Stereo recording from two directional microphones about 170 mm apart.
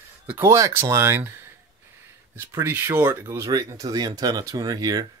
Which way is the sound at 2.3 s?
15° right (ahead or behind).